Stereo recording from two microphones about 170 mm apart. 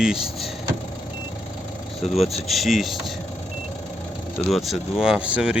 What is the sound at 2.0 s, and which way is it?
Speech, 40° left (ahead or behind).